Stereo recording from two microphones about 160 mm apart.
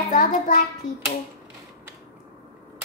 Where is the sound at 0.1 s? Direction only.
55° left (ahead or behind).